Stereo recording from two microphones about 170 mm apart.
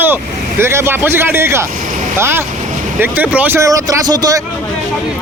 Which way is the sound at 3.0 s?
10° right (ahead or behind).